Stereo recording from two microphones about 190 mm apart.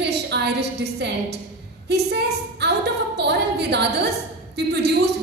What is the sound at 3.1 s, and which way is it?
A woman's voice, 60° right (ahead or behind).